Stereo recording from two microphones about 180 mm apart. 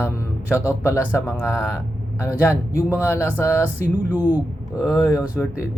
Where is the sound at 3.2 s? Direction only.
15° left (ahead or behind).